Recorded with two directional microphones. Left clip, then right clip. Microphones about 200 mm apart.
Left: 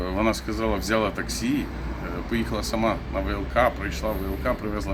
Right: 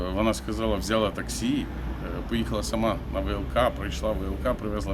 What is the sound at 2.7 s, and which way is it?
Speech, 20° right (ahead or behind).